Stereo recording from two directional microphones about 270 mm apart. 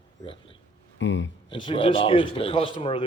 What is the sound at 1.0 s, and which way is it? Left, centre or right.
Speech, left.